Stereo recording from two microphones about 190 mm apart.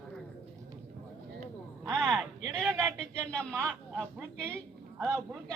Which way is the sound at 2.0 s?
Centre (ahead or behind).